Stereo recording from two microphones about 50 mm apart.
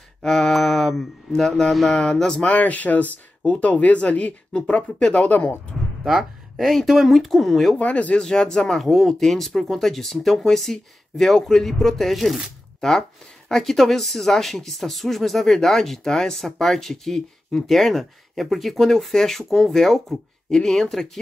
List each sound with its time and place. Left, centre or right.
0.2 s mantra: centre
1.9 s speech: centre
2.5 s speech: left
5.7 s a sound: centre
6.0 s speech: centre
7.8 s speech: left
8.2 s speech: centre
8.7 s speech: centre